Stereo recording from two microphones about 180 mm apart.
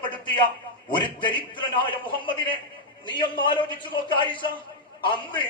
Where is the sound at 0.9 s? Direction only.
25° left (ahead or behind).